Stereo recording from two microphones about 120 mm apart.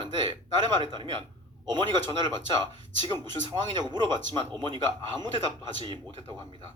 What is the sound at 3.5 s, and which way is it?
A man's voice, 30° right (ahead or behind).